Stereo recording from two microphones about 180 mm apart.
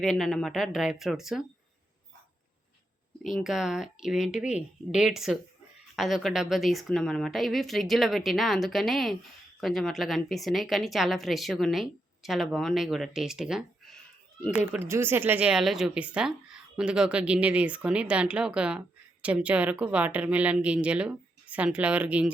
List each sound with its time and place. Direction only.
0.0 s a woman's voice: centre (ahead or behind)
3.4 s a woman's voice: centre (ahead or behind)